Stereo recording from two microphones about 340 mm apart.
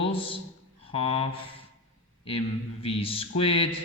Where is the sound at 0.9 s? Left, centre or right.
Centre.